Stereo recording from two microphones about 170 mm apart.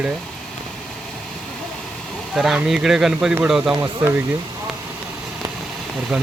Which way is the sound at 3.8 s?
15° right (ahead or behind).